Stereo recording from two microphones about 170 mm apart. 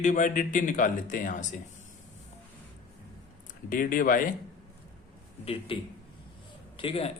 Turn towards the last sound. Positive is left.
turn(degrees=35)  # may be behind; listen again after turning